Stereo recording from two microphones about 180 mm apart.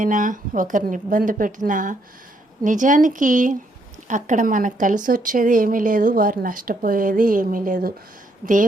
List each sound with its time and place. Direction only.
0.0 s a woman's voice: 45° right (ahead or behind)